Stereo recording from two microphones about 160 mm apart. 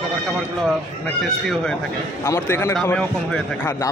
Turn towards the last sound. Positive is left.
turn(degrees=5)  # may be behind; listen again after turning